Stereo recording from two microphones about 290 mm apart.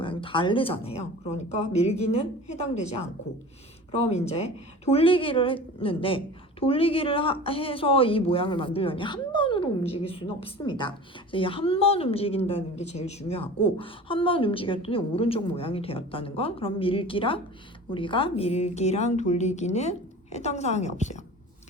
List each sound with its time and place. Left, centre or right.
0.0 s a woman's voice: centre